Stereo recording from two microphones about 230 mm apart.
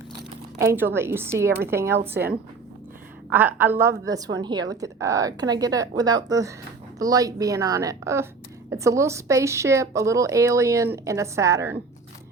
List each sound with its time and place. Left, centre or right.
0.6 s a woman's voice: centre
3.3 s a woman's voice: centre